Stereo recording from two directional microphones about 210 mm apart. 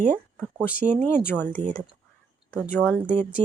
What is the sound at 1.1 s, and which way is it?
Speech, 10° left (ahead or behind).